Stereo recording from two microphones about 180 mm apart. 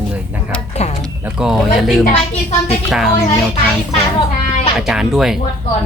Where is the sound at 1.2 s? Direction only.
5° right (ahead or behind).